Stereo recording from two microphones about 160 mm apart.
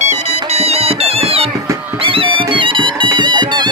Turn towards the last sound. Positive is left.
turn(degrees=-25)  # may be behind; listen again after turning